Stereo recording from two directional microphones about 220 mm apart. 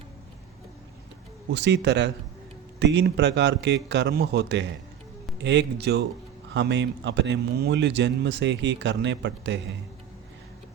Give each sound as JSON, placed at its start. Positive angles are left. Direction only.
{"t": 1.5, "sound": "a man's voice", "side_deg": -50}